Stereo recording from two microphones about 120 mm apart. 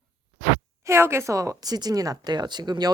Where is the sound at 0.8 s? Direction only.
20° right (ahead or behind).